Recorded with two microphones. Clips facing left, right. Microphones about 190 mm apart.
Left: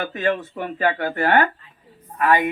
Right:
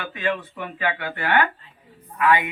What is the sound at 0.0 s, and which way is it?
Speech, 45° left (ahead or behind).